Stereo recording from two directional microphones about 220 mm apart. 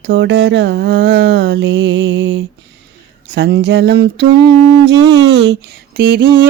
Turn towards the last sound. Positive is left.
turn(degrees=-45)  # may be behind; listen again after turning